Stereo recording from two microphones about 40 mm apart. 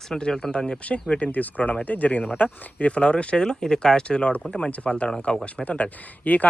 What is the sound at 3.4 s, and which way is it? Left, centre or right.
Speech, centre.